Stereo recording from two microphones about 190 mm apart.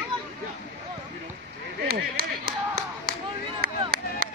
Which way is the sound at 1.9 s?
50° right (ahead or behind).